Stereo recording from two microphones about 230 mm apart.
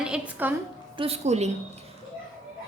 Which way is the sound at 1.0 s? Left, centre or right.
Right.